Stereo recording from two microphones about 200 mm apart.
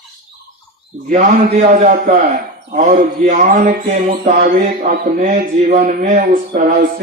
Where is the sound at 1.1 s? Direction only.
40° right (ahead or behind).